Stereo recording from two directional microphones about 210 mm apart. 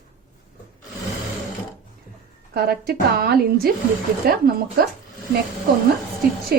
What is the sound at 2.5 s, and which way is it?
Speech, 45° right (ahead or behind).